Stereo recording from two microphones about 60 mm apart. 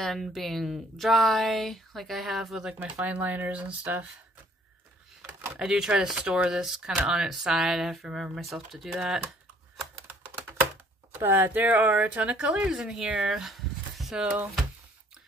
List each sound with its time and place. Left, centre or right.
0.0 s speech: centre
2.8 s speech: right
5.6 s speech: centre
11.1 s speech: right; by 13.3 s centre
13.3 s a sound: centre